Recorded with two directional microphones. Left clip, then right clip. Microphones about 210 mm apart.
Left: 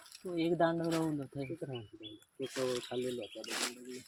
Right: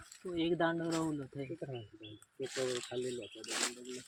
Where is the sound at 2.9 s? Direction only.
20° left (ahead or behind).